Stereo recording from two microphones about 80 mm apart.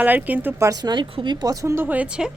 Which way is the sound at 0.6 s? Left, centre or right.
Right.